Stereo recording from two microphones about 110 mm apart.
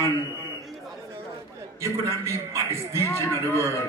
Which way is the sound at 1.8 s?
25° right (ahead or behind).